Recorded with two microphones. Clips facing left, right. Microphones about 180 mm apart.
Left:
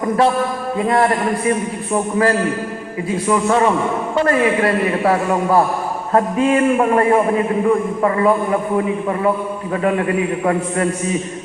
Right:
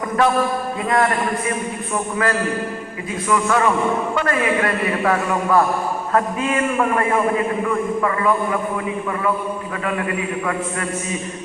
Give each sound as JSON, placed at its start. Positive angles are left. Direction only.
{"t": 0.9, "sound": "a man's voice", "side_deg": 30}
{"t": 10.4, "sound": "a man's voice", "side_deg": 35}